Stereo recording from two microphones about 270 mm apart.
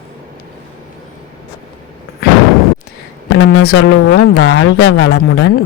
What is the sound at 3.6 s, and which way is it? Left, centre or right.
Speech, left.